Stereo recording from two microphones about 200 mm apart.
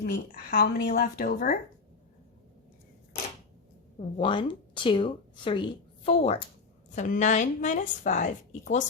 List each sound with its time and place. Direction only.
0.0 s a woman's voice: 50° left (ahead or behind)
4.2 s a woman's voice: 25° left (ahead or behind)